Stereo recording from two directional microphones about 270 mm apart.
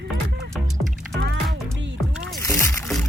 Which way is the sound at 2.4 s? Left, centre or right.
Centre.